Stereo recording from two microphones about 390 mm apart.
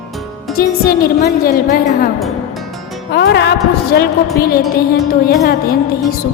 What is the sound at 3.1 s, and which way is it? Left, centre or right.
Speech, left.